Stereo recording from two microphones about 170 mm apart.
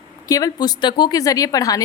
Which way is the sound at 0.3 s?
20° left (ahead or behind).